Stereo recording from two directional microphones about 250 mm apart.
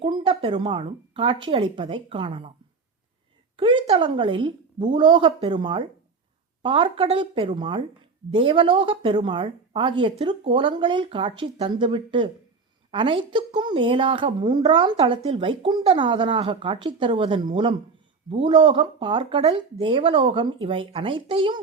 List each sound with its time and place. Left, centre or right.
0.0 s speech: centre
3.6 s speech: centre